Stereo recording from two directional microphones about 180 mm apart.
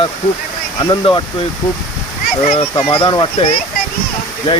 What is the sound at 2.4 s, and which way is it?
Speech, 35° left (ahead or behind).